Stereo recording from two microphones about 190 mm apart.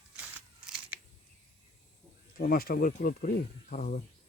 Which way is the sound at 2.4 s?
50° left (ahead or behind).